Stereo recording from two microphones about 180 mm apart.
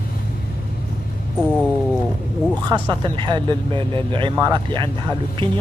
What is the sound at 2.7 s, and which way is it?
Speech, 25° right (ahead or behind).